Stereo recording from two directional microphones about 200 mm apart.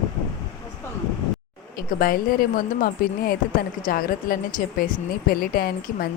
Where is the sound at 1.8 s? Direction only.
45° left (ahead or behind).